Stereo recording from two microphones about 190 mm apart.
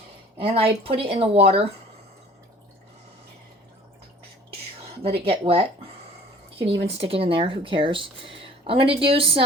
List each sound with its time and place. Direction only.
0.3 s speech: 30° right (ahead or behind)
5.0 s speech: 30° right (ahead or behind)
6.8 s speech: 30° right (ahead or behind)